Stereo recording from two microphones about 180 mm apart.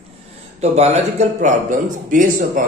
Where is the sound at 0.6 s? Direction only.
35° right (ahead or behind).